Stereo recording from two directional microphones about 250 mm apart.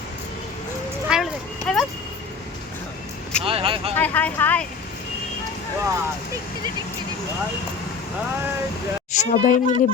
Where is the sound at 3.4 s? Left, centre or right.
Right.